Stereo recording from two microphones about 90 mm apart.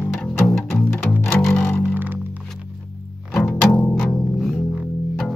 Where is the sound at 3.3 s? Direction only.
5° left (ahead or behind).